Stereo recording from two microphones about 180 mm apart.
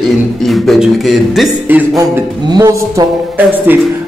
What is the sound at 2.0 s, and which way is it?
Speech, 20° right (ahead or behind).